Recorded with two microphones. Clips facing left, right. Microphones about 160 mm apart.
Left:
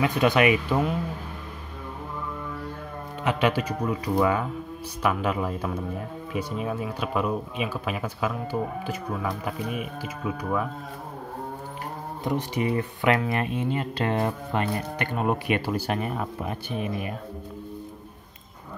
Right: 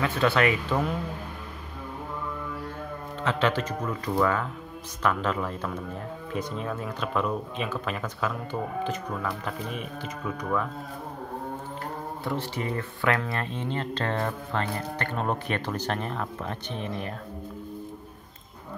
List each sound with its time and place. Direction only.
0.0 s speech: 15° left (ahead or behind)
3.3 s speech: 15° left (ahead or behind)
12.3 s speech: 15° left (ahead or behind)